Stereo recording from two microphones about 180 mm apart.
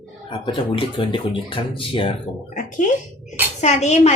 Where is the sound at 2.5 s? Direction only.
45° left (ahead or behind).